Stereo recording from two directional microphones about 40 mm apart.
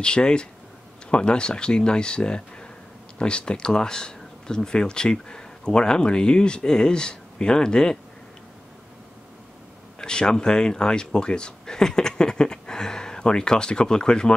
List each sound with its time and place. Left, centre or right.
0.0 s speech: left
9.9 s speech: centre